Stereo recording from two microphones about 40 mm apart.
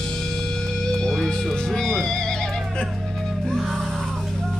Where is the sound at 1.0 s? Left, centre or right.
Centre.